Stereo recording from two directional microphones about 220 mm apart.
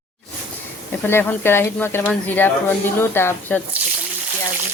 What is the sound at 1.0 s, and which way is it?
Speech, 10° left (ahead or behind).